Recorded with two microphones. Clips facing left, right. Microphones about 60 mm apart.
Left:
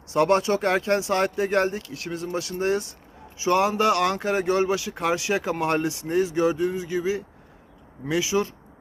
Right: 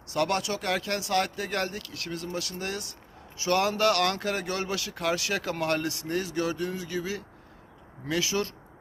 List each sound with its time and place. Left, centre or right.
0.1 s a man's voice: left